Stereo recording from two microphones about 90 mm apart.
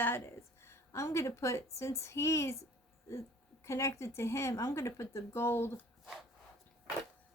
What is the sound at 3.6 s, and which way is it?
Speech, 35° left (ahead or behind).